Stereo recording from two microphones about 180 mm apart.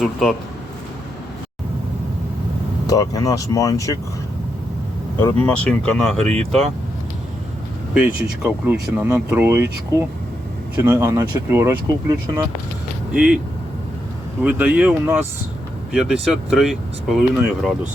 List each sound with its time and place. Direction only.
0.0 s speech: centre (ahead or behind)
2.8 s speech: 20° left (ahead or behind)
5.2 s speech: 10° left (ahead or behind)
6.2 s speech: 35° right (ahead or behind)
7.9 s speech: 10° right (ahead or behind)
13.1 s speech: 5° right (ahead or behind)
14.4 s speech: 10° right (ahead or behind)